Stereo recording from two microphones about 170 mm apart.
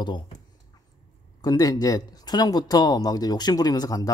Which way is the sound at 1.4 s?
20° left (ahead or behind).